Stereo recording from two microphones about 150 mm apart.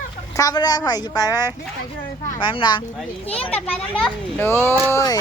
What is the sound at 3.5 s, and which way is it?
A child's voice, 10° left (ahead or behind).